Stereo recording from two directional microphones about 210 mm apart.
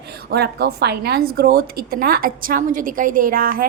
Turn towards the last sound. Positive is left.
turn(degrees=-45)  # may be behind; listen again after turning